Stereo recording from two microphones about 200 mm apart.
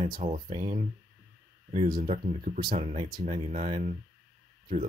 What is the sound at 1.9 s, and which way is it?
Speech, 35° right (ahead or behind).